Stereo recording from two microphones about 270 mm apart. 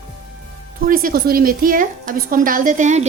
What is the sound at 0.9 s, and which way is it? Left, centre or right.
A woman's voice, right.